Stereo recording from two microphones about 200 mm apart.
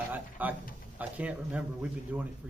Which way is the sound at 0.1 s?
10° right (ahead or behind).